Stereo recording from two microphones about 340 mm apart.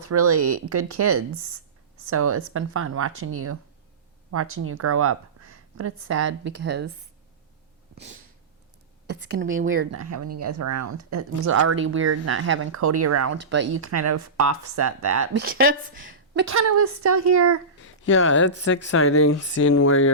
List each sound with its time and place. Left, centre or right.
0.0 s speech: right
7.9 s a sound: right
9.0 s speech: right
9.9 s speech: right
13.4 s speech: right
17.7 s speech: left